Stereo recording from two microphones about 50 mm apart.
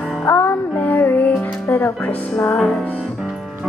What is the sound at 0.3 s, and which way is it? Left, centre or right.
Music, left.